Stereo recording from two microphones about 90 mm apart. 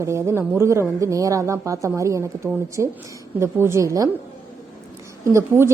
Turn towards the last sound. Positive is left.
turn(degrees=-30)  # may be behind; listen again after turning